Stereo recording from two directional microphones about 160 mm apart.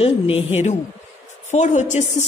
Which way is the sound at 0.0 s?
40° left (ahead or behind).